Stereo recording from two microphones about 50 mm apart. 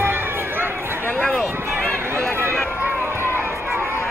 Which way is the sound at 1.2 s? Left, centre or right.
Centre.